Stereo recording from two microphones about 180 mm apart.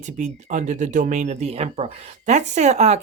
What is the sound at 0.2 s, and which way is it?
Speech, 40° right (ahead or behind).